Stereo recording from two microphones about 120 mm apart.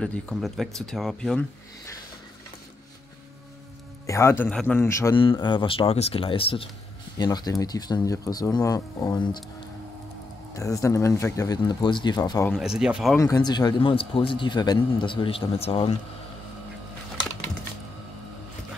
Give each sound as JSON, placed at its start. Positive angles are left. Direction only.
{"t": 0.0, "sound": "speech", "side_deg": 5}
{"t": 4.0, "sound": "speech", "side_deg": 25}
{"t": 4.5, "sound": "speech", "side_deg": 5}
{"t": 4.7, "sound": "speech", "side_deg": 25}
{"t": 5.1, "sound": "speech", "side_deg": 45}
{"t": 7.2, "sound": "speech", "side_deg": 35}
{"t": 10.5, "sound": "speech", "side_deg": 25}
{"t": 12.5, "sound": "speech", "side_deg": -5}
{"t": 13.2, "sound": "speech", "side_deg": 30}